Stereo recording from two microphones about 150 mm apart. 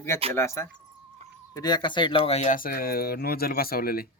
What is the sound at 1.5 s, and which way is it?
Speech, 30° left (ahead or behind).